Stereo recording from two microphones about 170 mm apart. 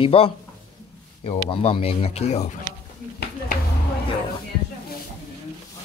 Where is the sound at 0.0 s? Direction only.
35° left (ahead or behind).